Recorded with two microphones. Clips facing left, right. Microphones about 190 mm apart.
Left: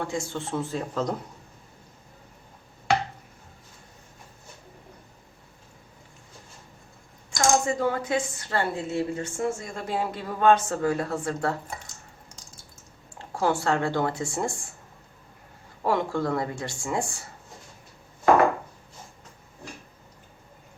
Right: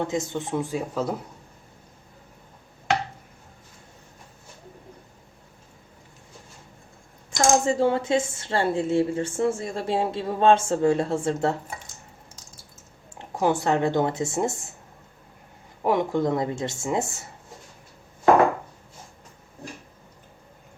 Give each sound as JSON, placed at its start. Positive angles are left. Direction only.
{"t": 0.0, "sound": "speech", "side_deg": -20}
{"t": 7.3, "sound": "a woman's voice", "side_deg": -30}
{"t": 13.1, "sound": "a woman's voice", "side_deg": -20}
{"t": 15.8, "sound": "a woman's voice", "side_deg": -20}